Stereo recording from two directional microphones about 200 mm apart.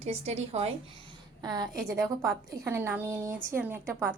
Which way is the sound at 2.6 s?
10° right (ahead or behind).